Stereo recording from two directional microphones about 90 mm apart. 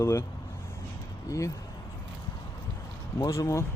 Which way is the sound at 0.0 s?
35° left (ahead or behind).